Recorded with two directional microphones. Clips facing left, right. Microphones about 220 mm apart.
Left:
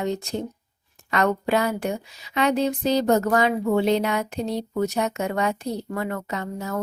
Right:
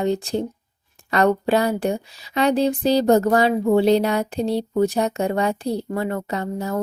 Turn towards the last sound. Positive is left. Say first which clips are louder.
# right 4 dB
turn(degrees=-35)  # may be behind; listen again after turning